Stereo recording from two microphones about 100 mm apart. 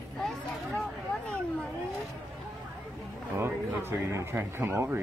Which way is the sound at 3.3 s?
25° right (ahead or behind).